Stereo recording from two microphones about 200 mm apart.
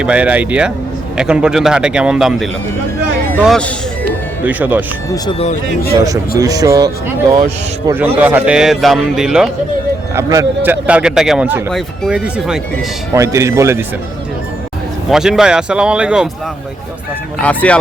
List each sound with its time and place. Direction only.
0.0 s a man's voice: 5° right (ahead or behind)
6.4 s a man's voice: 20° right (ahead or behind); by 9.5 s 5° right (ahead or behind)
10.2 s a man's voice: 15° right (ahead or behind)
13.1 s a man's voice: 15° right (ahead or behind)
15.1 s a man's voice: 5° right (ahead or behind)
17.4 s speech: 5° left (ahead or behind)